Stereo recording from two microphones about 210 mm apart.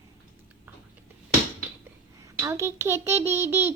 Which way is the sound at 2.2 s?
15° right (ahead or behind).